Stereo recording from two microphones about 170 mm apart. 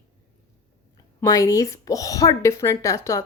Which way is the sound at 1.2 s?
20° left (ahead or behind).